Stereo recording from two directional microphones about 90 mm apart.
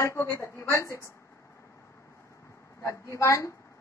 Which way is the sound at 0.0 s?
30° left (ahead or behind).